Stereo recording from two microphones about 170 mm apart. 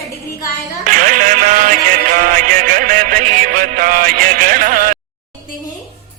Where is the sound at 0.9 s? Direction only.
50° right (ahead or behind).